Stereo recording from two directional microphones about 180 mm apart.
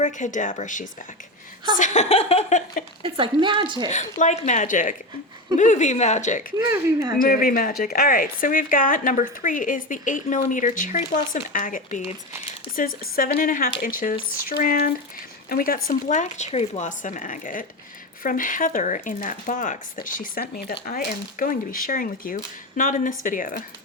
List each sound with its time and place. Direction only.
0.0 s speech: 45° left (ahead or behind)
3.0 s speech: 30° right (ahead or behind)
3.9 s speech: 40° left (ahead or behind)
6.7 s speech: 15° right (ahead or behind)
7.2 s speech: 55° left (ahead or behind)